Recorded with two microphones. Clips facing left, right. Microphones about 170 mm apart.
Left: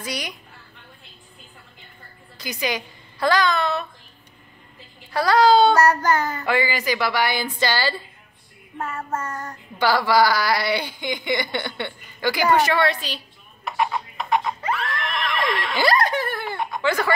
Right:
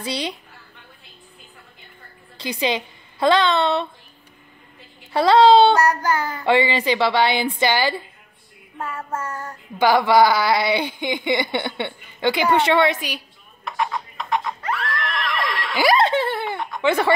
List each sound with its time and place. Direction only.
0.0 s a woman's voice: 30° right (ahead or behind)
2.3 s a woman's voice: 30° right (ahead or behind)
5.1 s a woman's voice: 25° right (ahead or behind)
5.8 s child singing: 10° right (ahead or behind)
6.4 s a woman's voice: 25° right (ahead or behind)
8.8 s child singing: 10° right (ahead or behind)
9.8 s a woman's voice: 20° right (ahead or behind)
13.7 s neigh: 5° left (ahead or behind)
16.0 s giggle: 25° right (ahead or behind)
16.8 s a woman's voice: 25° right (ahead or behind)